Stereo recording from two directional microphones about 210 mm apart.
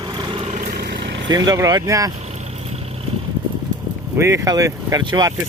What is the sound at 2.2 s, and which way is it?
Vehicle, 30° right (ahead or behind).